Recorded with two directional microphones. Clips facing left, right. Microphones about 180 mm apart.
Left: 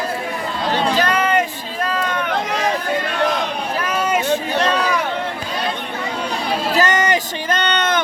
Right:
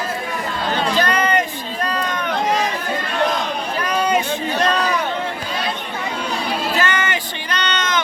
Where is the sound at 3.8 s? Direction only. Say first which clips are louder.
Right 2 dB; 5° left (ahead or behind).